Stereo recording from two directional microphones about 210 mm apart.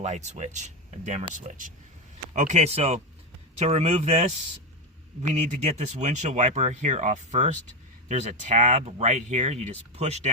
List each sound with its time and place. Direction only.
0.0 s speech: 35° right (ahead or behind)